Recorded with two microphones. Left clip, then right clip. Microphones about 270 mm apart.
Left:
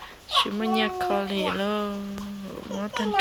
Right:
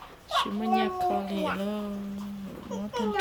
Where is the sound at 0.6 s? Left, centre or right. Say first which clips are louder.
Left 1 dB; centre.